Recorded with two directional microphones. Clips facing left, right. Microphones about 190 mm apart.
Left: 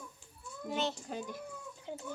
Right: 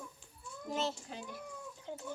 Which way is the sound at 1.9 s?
15° left (ahead or behind).